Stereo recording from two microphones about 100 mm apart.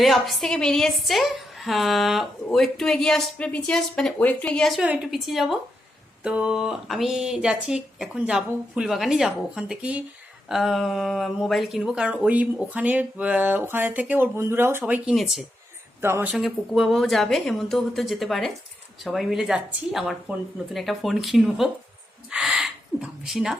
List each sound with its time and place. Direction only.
0.0 s a woman's voice: centre (ahead or behind); by 15.1 s 15° right (ahead or behind)
15.1 s a woman's voice: centre (ahead or behind)
16.0 s speech: 25° right (ahead or behind)
16.3 s a woman's voice: 5° right (ahead or behind)